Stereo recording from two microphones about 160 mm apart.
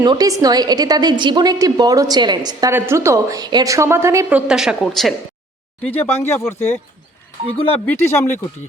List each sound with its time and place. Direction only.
0.0 s a woman's voice: 25° right (ahead or behind); by 4.9 s 5° right (ahead or behind)
5.8 s speech: 10° left (ahead or behind)